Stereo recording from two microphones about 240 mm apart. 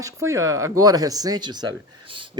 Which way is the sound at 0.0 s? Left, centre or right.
Centre.